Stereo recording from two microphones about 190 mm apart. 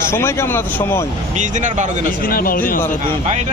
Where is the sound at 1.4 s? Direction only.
40° right (ahead or behind).